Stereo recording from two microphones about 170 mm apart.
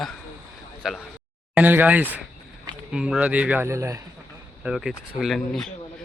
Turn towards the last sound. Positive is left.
turn(degrees=5)  # may be behind; listen again after turning